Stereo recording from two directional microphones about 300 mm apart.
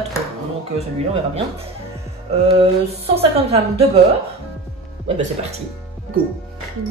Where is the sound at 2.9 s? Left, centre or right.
Centre.